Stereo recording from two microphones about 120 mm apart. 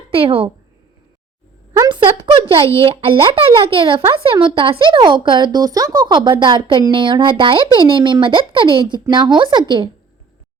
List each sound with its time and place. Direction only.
0.1 s speech: 50° right (ahead or behind)
1.9 s a sound: 45° right (ahead or behind)
2.7 s speech: 55° right (ahead or behind)